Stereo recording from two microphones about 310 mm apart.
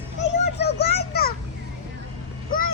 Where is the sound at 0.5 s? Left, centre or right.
Left.